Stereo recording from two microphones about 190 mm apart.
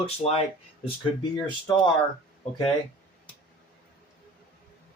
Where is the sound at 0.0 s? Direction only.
35° left (ahead or behind).